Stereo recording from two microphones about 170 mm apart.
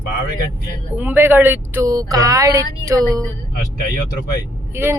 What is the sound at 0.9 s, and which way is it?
Speech, 10° right (ahead or behind).